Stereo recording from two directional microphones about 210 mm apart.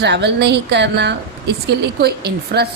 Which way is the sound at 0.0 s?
55° right (ahead or behind).